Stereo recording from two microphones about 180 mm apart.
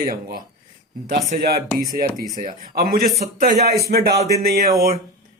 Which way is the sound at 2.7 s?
55° right (ahead or behind).